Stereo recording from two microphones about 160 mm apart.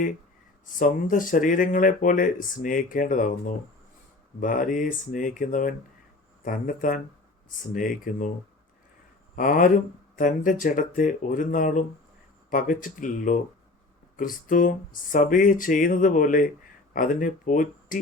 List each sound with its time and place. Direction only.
0.6 s speech: 55° left (ahead or behind)
9.3 s speech: 55° left (ahead or behind)